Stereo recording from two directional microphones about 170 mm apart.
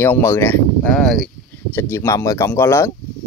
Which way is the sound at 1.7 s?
15° left (ahead or behind).